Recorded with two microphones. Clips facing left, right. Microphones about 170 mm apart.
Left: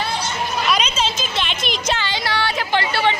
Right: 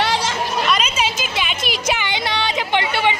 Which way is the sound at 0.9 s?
10° right (ahead or behind).